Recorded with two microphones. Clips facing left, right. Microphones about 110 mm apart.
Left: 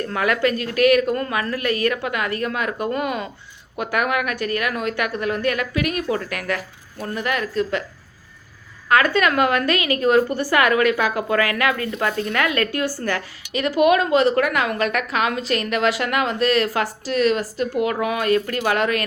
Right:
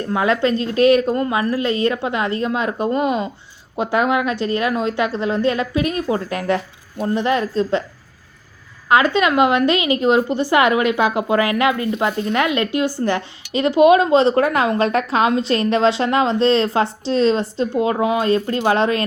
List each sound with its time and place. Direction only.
0.0 s a woman's voice: 20° right (ahead or behind)
8.9 s a woman's voice: 20° right (ahead or behind)